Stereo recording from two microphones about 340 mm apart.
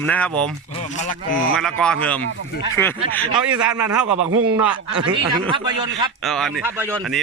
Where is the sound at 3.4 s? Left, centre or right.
Centre.